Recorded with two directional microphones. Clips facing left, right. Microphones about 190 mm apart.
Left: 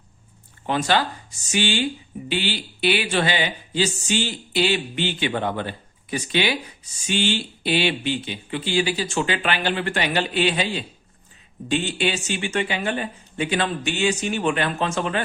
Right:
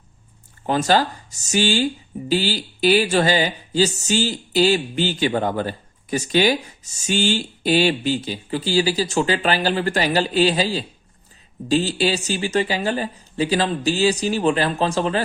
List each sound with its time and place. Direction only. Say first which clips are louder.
0.7 s speech: right 3 dB; 40° right (ahead or behind)